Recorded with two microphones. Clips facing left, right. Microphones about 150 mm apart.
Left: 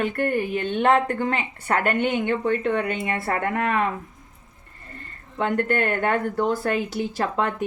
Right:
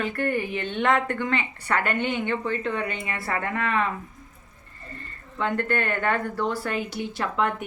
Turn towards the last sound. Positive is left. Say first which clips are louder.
# left 2 dB
turn(degrees=35)  # may be behind; listen again after turning